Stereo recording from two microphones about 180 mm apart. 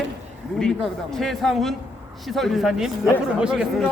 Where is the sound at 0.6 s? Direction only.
5° left (ahead or behind).